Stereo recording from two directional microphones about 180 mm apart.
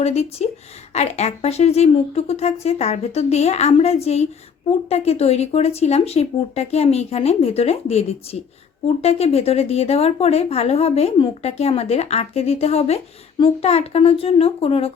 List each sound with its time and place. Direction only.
0.0 s speech: 35° left (ahead or behind)